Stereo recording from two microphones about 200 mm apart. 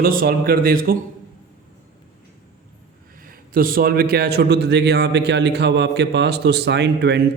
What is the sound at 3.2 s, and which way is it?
A man's voice, 45° right (ahead or behind).